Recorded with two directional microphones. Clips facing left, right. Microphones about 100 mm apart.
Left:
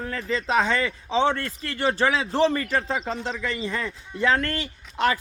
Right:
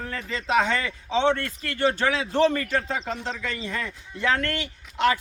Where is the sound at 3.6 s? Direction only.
30° left (ahead or behind).